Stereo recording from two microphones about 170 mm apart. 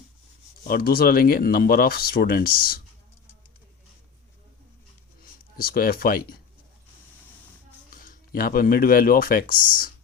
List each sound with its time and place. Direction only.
0.7 s speech: 60° left (ahead or behind)
5.5 s speech: 60° left (ahead or behind)
7.9 s speech: 55° left (ahead or behind)